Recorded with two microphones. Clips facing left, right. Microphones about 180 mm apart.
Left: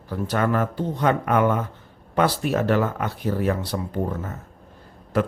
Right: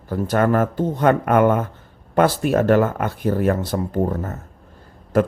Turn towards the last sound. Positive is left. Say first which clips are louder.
# right 5 dB
turn(degrees=-45)  # may be behind; listen again after turning